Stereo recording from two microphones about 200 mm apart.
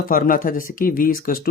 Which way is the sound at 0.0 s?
45° left (ahead or behind).